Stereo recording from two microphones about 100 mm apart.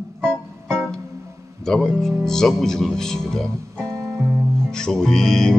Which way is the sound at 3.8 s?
35° right (ahead or behind).